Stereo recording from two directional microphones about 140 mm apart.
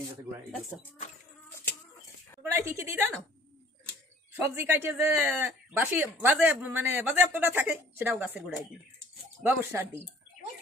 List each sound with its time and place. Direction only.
0.7 s speech: centre (ahead or behind)
2.4 s a woman's voice: 20° right (ahead or behind)
4.6 s speech: 15° right (ahead or behind)